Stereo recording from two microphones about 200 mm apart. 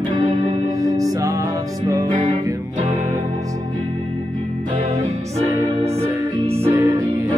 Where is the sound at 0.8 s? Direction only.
15° right (ahead or behind).